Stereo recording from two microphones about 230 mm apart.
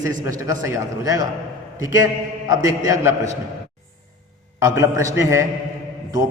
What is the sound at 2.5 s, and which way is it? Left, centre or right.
Speech, centre.